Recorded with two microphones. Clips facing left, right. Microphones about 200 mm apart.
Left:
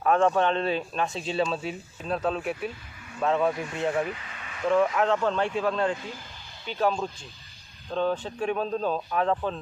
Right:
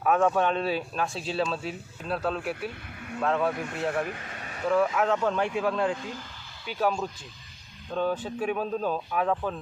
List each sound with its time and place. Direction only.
0.0 s speech: 5° right (ahead or behind)
4.1 s a sound: 45° right (ahead or behind)
4.7 s speech: 5° right (ahead or behind)